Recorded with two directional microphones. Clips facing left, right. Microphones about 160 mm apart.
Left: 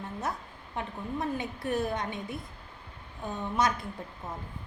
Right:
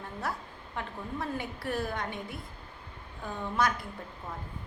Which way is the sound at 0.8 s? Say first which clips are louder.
Left 3 dB; 20° left (ahead or behind).